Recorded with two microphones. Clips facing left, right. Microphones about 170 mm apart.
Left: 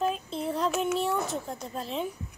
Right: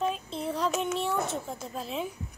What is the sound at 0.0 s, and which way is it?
A child's voice, centre (ahead or behind).